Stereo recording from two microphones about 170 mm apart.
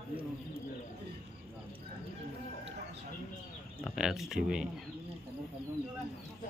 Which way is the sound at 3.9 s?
Centre (ahead or behind).